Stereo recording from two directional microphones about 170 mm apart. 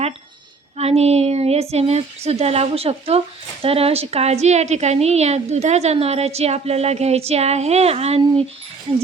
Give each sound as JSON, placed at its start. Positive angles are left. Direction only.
{"t": 0.8, "sound": "a woman's voice", "side_deg": -35}